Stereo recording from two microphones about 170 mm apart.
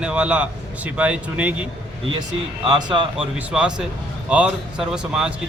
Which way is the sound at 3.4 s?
5° right (ahead or behind).